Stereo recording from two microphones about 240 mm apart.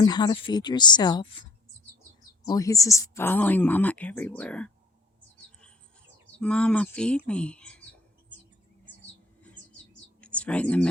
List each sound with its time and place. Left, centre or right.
0.0 s speech: centre
6.4 s speech: centre
10.2 s a sound: centre